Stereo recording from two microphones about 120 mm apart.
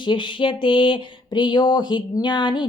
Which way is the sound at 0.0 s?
40° left (ahead or behind).